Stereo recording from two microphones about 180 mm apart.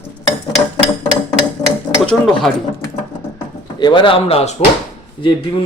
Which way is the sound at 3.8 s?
25° left (ahead or behind).